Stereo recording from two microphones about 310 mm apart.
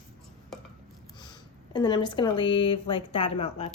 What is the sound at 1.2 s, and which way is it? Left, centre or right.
Speech, centre.